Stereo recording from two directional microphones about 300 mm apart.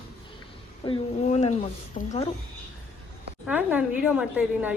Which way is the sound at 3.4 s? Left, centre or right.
Centre.